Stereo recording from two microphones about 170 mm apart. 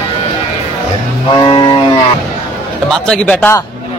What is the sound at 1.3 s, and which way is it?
Speech, 25° left (ahead or behind).